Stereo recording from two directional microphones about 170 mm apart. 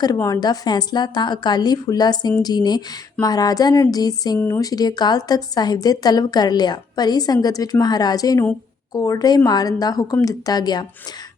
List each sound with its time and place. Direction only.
0.0 s a woman's voice: 20° left (ahead or behind)